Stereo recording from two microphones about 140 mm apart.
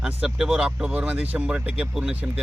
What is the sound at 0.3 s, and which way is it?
Speech, 5° right (ahead or behind).